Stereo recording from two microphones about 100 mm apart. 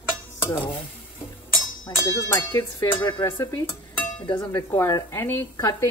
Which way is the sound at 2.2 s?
25° left (ahead or behind).